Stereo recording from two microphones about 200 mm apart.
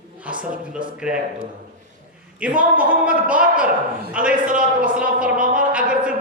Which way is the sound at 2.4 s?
5° right (ahead or behind).